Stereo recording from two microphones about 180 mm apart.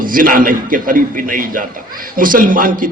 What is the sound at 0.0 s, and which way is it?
A man's voice, 50° right (ahead or behind).